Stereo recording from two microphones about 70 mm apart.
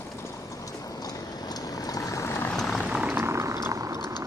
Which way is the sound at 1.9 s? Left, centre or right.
Left.